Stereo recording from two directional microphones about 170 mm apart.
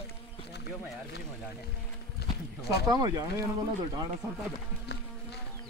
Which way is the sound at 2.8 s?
25° right (ahead or behind).